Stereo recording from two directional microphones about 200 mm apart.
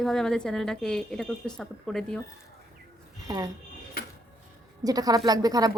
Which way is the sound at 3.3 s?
15° right (ahead or behind).